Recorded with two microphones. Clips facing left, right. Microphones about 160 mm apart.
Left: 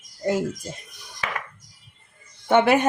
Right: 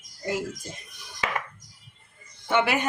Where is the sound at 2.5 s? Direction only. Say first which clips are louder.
Left 6 dB; 50° left (ahead or behind).